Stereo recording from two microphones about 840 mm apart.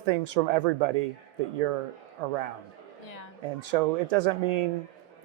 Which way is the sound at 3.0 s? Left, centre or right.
Left.